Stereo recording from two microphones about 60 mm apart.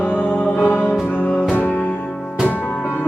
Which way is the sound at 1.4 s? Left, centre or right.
Centre.